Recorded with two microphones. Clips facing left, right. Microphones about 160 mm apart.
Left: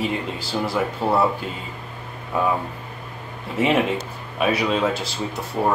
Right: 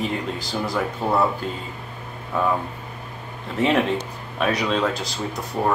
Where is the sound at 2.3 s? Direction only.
10° left (ahead or behind).